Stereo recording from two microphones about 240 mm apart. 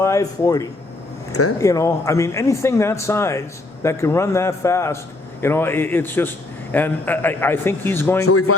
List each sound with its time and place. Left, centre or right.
0.0 s a man's voice: centre
1.3 s speech: left
1.5 s a man's voice: centre
8.2 s speech: left